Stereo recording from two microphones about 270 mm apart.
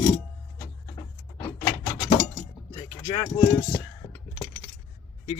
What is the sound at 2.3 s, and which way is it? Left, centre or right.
Cutlery, centre.